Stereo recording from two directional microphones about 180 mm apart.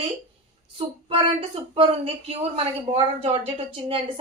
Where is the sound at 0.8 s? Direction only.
30° right (ahead or behind).